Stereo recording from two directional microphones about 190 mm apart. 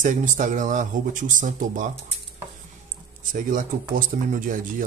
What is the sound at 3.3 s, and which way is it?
Speech, 45° right (ahead or behind).